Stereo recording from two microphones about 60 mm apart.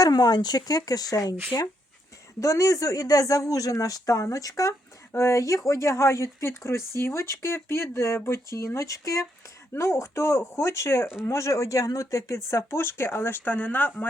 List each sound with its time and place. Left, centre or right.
0.0 s speech: left
2.4 s speech: left
5.1 s speech: left
12.5 s speech: left